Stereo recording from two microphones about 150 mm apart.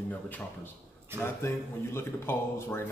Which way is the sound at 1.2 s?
15° left (ahead or behind).